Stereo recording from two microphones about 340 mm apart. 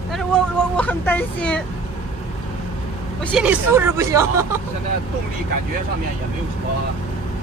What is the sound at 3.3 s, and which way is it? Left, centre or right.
Speech, centre.